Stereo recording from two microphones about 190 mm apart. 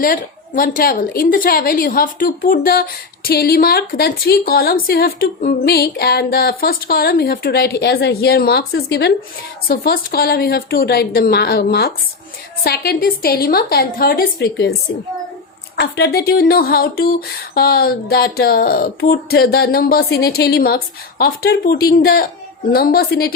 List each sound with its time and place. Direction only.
0.0 s a woman's voice: 45° left (ahead or behind)